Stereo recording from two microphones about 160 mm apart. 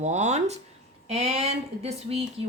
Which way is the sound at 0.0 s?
45° right (ahead or behind).